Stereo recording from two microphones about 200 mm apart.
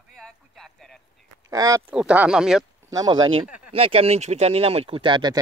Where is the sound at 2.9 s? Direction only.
20° right (ahead or behind).